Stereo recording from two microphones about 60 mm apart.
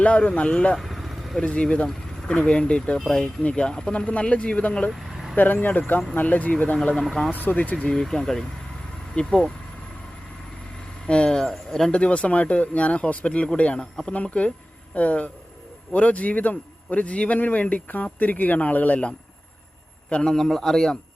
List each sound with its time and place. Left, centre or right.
0.0 s speech: centre
0.8 s vehicle: centre
1.4 s speech: centre
1.9 s vehicle: centre
2.4 s a man's voice: centre
4.9 s vehicle: centre
5.4 s speech: left
6.9 s speech: centre
7.4 s speech: left
7.9 s a man's voice: centre
11.0 s a man's voice: centre